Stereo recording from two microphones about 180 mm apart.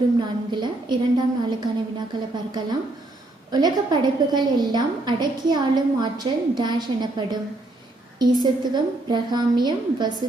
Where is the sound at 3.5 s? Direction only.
20° right (ahead or behind).